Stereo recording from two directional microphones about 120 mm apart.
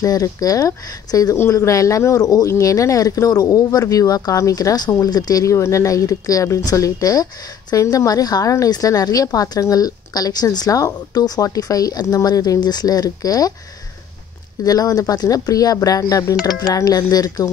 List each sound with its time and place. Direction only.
0.0 s speech: 30° left (ahead or behind)
14.6 s speech: 30° left (ahead or behind)